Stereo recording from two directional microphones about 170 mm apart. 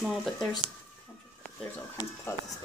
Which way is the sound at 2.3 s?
15° left (ahead or behind).